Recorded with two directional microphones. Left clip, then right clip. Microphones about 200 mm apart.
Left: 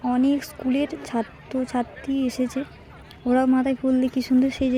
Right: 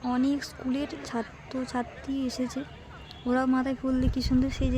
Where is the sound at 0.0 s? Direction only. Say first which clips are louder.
Left 6 dB; 15° left (ahead or behind).